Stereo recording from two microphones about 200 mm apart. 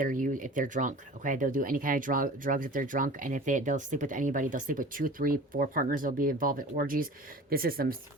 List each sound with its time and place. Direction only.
0.0 s speech: 40° right (ahead or behind)